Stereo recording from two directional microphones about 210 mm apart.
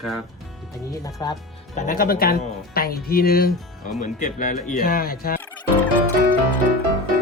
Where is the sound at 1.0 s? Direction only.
20° left (ahead or behind).